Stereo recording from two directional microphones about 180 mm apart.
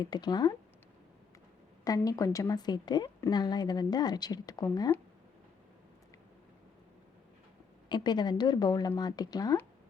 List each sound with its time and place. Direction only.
0.0 s a woman's voice: 25° left (ahead or behind)
1.8 s a woman's voice: 20° left (ahead or behind)
7.9 s a woman's voice: 25° left (ahead or behind)